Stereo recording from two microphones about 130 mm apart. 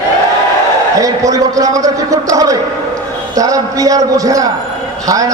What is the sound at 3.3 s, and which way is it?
A man's voice, 25° right (ahead or behind).